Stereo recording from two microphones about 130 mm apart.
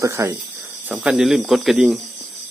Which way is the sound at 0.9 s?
10° right (ahead or behind).